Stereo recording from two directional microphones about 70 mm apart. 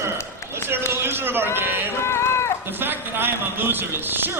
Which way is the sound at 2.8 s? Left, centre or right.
Right.